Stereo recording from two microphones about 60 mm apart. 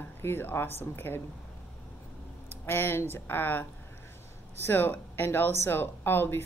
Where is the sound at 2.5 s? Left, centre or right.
Left.